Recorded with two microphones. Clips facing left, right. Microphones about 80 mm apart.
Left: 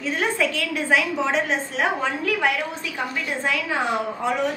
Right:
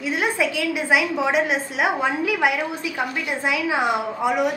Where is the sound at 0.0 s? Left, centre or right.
Centre.